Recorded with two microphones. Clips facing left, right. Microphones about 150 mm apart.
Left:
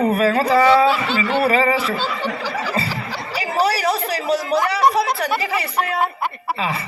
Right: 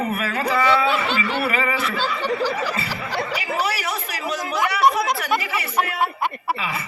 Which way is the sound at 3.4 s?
35° left (ahead or behind).